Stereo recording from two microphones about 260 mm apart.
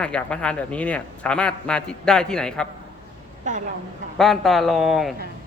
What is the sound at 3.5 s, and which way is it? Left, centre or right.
Speech, right.